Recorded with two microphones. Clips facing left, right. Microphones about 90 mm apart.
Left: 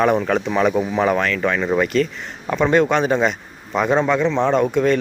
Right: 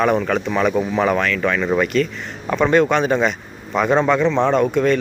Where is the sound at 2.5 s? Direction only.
20° left (ahead or behind).